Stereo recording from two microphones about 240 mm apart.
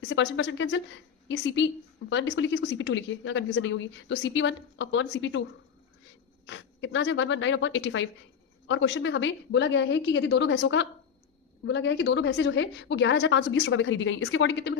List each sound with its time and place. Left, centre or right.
0.1 s a woman's voice: left
6.4 s a woman's voice: left